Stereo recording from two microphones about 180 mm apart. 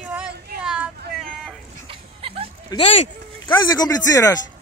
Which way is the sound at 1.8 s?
30° right (ahead or behind).